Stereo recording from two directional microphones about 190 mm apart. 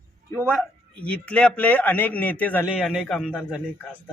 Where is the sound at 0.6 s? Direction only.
5° left (ahead or behind).